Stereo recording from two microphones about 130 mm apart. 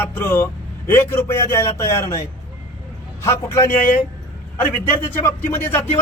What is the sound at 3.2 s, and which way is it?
Speech, 20° left (ahead or behind).